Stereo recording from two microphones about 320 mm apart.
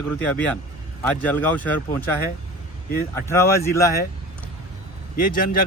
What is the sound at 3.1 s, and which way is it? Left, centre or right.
Speech, centre.